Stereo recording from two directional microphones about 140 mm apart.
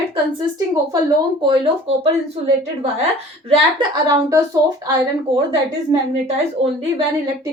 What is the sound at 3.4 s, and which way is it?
Speech, 45° right (ahead or behind).